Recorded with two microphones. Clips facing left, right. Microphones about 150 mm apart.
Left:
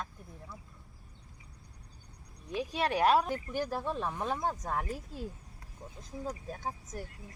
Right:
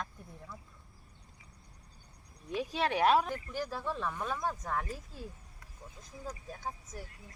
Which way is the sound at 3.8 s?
25° left (ahead or behind).